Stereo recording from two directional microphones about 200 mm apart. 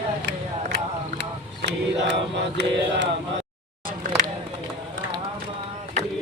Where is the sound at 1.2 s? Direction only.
60° right (ahead or behind).